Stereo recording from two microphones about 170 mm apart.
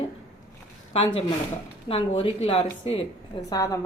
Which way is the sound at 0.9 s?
30° left (ahead or behind).